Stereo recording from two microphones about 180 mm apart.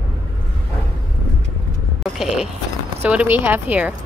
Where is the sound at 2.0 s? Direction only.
Centre (ahead or behind).